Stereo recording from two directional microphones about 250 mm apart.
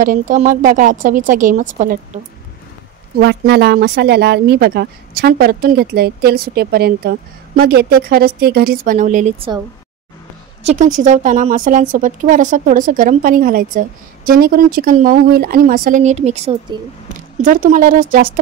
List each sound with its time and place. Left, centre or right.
0.0 s speech: right
3.2 s speech: right
10.6 s speech: right